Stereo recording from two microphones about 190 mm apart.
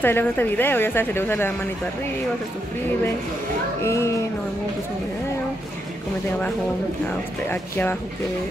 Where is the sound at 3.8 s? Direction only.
15° left (ahead or behind).